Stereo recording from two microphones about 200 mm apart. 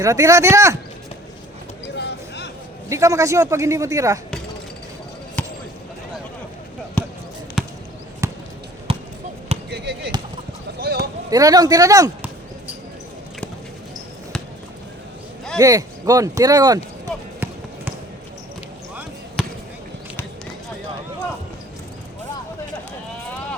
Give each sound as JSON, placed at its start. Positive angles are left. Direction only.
{"t": 0.0, "sound": "a man's voice", "side_deg": -15}
{"t": 2.0, "sound": "a sound", "side_deg": 60}
{"t": 2.9, "sound": "a man's voice", "side_deg": -15}
{"t": 5.4, "sound": "basketball bounce", "side_deg": 5}
{"t": 7.6, "sound": "basketball bounce", "side_deg": 0}
{"t": 8.2, "sound": "basketball bounce", "side_deg": -15}
{"t": 8.9, "sound": "basketball bounce", "side_deg": -30}
{"t": 9.6, "sound": "basketball bounce", "side_deg": -55}
{"t": 10.8, "sound": "run", "side_deg": -55}
{"t": 11.3, "sound": "a man's voice", "side_deg": -20}
{"t": 15.5, "sound": "a man's voice", "side_deg": -15}
{"t": 19.4, "sound": "basketball bounce", "side_deg": 0}